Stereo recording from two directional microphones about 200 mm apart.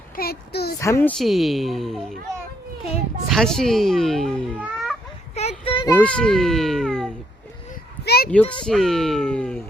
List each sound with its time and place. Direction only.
0.2 s a sound: 50° left (ahead or behind)
0.8 s a woman's voice: 15° left (ahead or behind)
1.2 s a child's voice: centre (ahead or behind)
3.2 s speech: centre (ahead or behind)
5.3 s child singing: 30° left (ahead or behind)
5.9 s a child's voice: 5° left (ahead or behind)
8.0 s a sound: 50° left (ahead or behind)
8.3 s a woman's voice: 5° left (ahead or behind)